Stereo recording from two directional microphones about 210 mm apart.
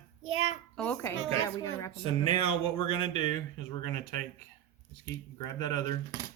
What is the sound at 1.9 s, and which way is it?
Speech, 25° left (ahead or behind).